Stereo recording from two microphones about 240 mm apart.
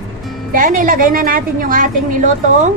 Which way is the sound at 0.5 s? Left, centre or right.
Right.